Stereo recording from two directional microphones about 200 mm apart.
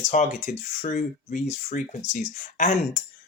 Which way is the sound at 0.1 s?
35° left (ahead or behind).